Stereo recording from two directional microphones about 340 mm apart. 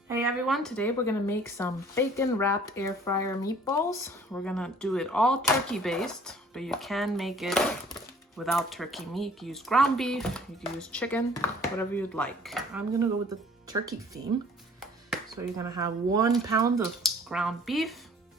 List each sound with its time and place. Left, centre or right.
0.1 s speech: centre
15.4 s speech: centre